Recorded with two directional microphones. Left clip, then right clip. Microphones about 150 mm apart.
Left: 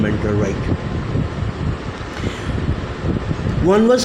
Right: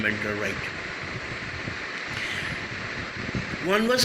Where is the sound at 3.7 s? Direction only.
45° left (ahead or behind).